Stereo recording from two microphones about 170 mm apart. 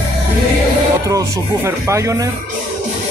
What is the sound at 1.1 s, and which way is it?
Speech, 15° right (ahead or behind).